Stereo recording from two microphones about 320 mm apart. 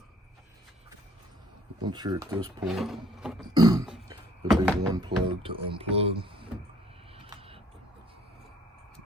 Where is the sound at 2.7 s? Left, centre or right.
Centre.